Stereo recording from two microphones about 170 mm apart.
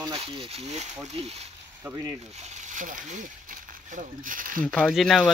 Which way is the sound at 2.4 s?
45° right (ahead or behind).